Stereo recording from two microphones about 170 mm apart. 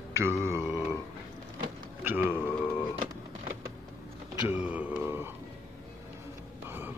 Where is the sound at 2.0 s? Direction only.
10° right (ahead or behind).